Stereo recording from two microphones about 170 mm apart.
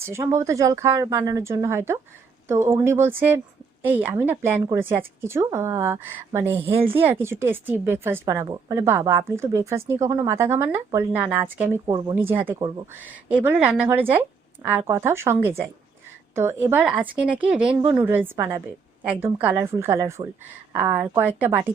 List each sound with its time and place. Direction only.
0.0 s a woman's voice: 15° right (ahead or behind)
11.9 s speech: 25° right (ahead or behind)
12.1 s a woman's voice: 10° right (ahead or behind)